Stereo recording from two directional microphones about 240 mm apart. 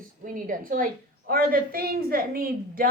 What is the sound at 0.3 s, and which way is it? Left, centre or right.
A woman's voice, right.